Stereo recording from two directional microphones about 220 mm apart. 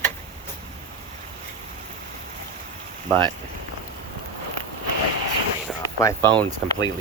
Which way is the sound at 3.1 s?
20° right (ahead or behind).